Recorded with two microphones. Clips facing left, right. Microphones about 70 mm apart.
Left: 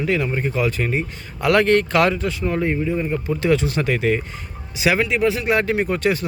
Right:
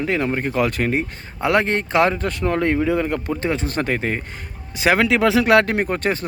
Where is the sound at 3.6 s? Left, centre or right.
Right.